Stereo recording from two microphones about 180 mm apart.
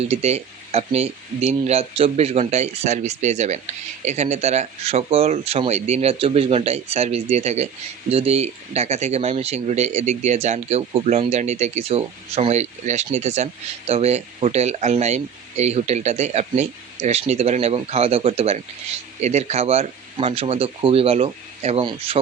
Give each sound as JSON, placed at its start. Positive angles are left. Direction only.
{"t": 0.0, "sound": "speech", "side_deg": -35}